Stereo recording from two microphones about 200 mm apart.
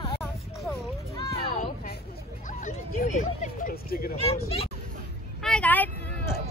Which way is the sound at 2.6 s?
40° left (ahead or behind).